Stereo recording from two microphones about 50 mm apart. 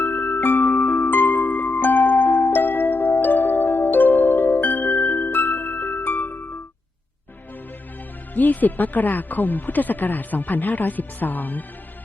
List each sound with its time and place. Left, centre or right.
0.0 s music: left
8.4 s speech: left